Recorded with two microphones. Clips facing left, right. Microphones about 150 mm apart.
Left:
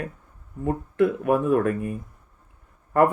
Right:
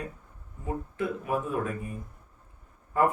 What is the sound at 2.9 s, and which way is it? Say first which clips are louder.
Speech: left 6 dB; 65° left (ahead or behind).